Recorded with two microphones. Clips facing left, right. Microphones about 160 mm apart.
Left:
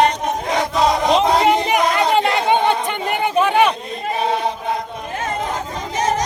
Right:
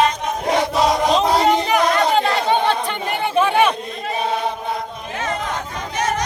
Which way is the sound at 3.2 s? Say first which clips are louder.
Left 1 dB; 15° left (ahead or behind).